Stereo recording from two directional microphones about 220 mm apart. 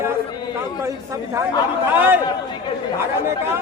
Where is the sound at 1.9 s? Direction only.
10° right (ahead or behind).